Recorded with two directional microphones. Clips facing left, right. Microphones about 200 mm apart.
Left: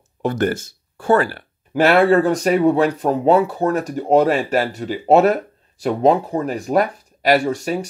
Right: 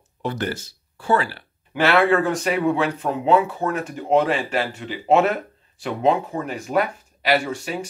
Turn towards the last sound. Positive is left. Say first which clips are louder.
# left 5 dB
turn(degrees=40)  # may be behind; listen again after turning